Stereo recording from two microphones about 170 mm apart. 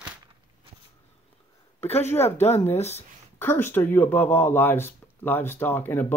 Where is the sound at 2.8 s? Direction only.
40° left (ahead or behind).